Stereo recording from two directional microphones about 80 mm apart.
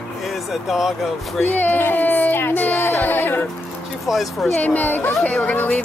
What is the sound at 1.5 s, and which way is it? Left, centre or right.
Speech, left.